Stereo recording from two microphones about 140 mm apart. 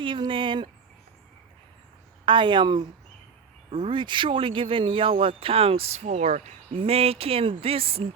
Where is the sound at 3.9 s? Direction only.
35° right (ahead or behind); by 6.5 s 60° right (ahead or behind).